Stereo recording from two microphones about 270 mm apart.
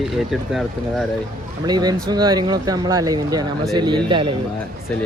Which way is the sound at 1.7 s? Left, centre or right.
Centre.